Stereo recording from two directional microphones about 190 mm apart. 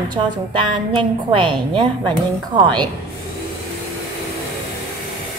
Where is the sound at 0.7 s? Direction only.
25° right (ahead or behind).